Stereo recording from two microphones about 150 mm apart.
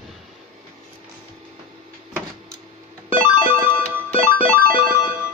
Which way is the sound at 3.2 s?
65° right (ahead or behind).